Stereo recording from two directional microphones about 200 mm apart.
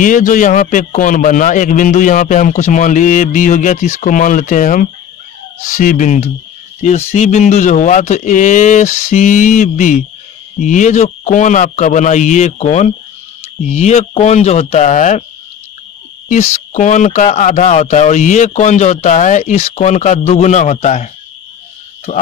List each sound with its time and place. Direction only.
0.0 s speech: 40° left (ahead or behind)
16.3 s speech: 35° left (ahead or behind)